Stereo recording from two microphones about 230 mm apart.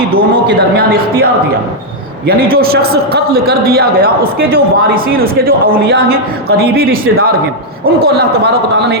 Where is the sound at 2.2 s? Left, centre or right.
Right.